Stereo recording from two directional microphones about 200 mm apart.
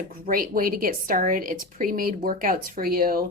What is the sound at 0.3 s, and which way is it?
A woman's voice, 45° right (ahead or behind).